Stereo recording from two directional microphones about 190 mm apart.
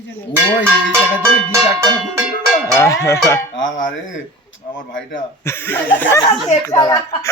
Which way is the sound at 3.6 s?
75° left (ahead or behind).